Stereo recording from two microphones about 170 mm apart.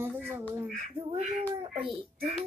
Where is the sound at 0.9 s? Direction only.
35° right (ahead or behind).